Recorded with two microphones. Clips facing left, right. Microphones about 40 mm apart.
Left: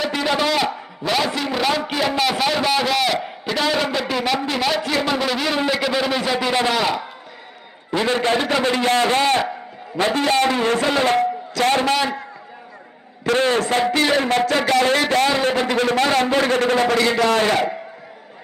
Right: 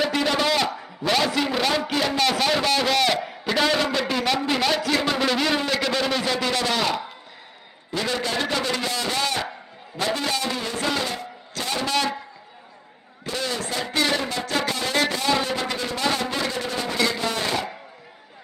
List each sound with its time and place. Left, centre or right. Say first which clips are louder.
0.0 s a sound: left 2 dB; centre
1.4 s a man's voice: left 2 dB; centre; by 6.7 s left
6.7 s a man's voice: left 3 dB; centre
7.9 s a man's voice: left 6 dB; left
11.0 s a man's voice: left 12 dB; left
13.3 s a man's voice: left 10 dB; left
13.9 s speech: even; left
14.2 s a man's voice: left 8 dB; left